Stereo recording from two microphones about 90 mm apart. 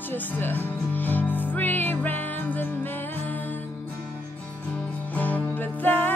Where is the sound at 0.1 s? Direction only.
20° left (ahead or behind).